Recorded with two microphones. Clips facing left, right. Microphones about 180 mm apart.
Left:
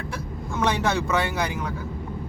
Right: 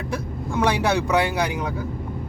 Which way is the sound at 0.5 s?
10° right (ahead or behind).